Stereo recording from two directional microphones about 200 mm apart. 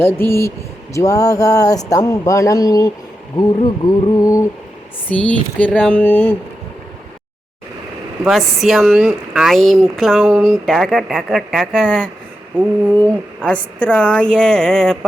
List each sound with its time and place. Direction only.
0.0 s speech: 10° left (ahead or behind)
8.2 s speech: centre (ahead or behind)
10.5 s speech: centre (ahead or behind)